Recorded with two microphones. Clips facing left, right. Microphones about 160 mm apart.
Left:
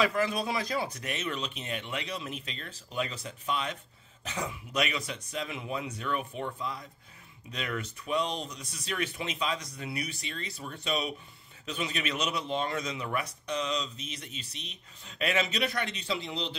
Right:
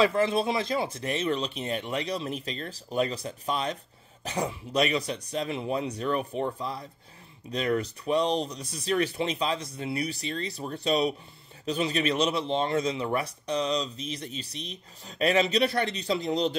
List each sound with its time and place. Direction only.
0.0 s a man's voice: 25° right (ahead or behind)